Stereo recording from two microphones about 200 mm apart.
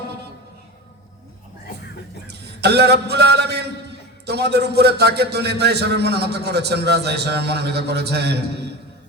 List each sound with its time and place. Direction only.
2.2 s a man's voice: 55° right (ahead or behind)